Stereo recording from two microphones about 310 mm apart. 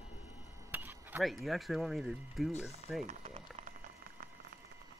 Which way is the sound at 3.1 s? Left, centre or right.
Right.